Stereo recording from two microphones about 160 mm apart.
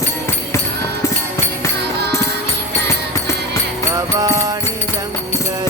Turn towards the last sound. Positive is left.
turn(degrees=-20)  # may be behind; listen again after turning